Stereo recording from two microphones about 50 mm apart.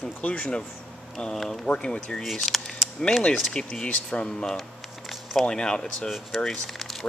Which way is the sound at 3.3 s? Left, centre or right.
Centre.